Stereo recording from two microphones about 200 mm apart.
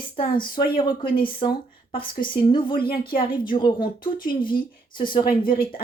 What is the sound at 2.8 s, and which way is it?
Speech, 50° left (ahead or behind).